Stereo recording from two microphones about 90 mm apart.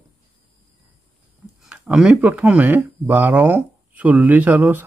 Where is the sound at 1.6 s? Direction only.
15° right (ahead or behind).